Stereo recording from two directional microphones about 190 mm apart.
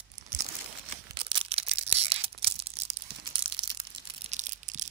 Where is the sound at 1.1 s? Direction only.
25° right (ahead or behind).